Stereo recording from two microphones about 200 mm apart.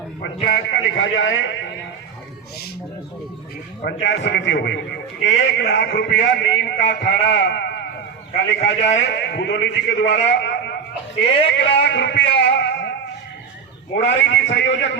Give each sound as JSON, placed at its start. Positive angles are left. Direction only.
{"t": 0.5, "sound": "a man's voice", "side_deg": 65}
{"t": 4.0, "sound": "a man's voice", "side_deg": 60}
{"t": 8.3, "sound": "a man's voice", "side_deg": 30}
{"t": 9.0, "sound": "a man's voice", "side_deg": 60}
{"t": 13.9, "sound": "a man's voice", "side_deg": 65}